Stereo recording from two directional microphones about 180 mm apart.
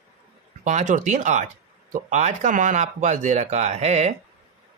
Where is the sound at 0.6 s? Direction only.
40° right (ahead or behind).